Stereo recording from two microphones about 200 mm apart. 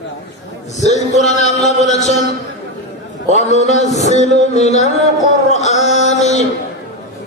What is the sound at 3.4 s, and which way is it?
A man's voice, 35° left (ahead or behind).